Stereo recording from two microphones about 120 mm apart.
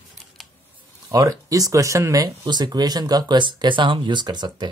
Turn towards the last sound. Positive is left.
turn(degrees=-40)  # may be behind; listen again after turning